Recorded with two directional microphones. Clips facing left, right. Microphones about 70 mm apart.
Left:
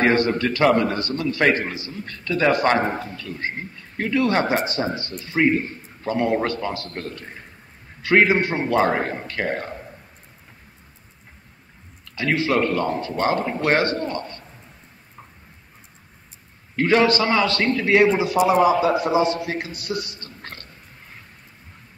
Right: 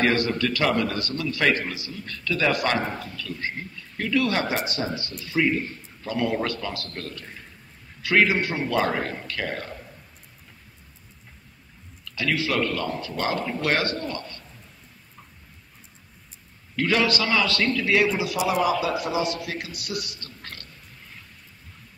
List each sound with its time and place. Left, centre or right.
0.0 s a man's voice: left
12.0 s a man's voice: left
16.7 s a man's voice: left